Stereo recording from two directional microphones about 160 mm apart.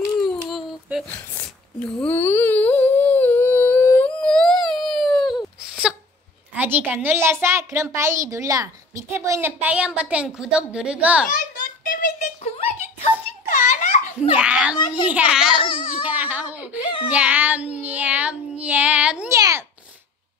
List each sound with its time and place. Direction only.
0.3 s a sound: centre (ahead or behind)
1.0 s humming: 10° left (ahead or behind)
6.5 s a woman's voice: 10° right (ahead or behind)
11.2 s a sound: 55° left (ahead or behind)
12.5 s a sound: 45° left (ahead or behind)
14.3 s a child's voice: 5° right (ahead or behind)
15.6 s babbling: 35° left (ahead or behind)
16.0 s baby cry: 10° right (ahead or behind)
17.1 s child singing: 10° right (ahead or behind)
19.3 s babbling: 20° right (ahead or behind)